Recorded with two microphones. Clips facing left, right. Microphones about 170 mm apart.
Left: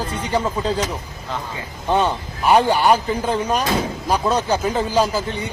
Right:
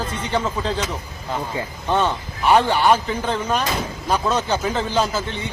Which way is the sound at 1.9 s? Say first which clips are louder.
Left 1 dB; 15° left (ahead or behind).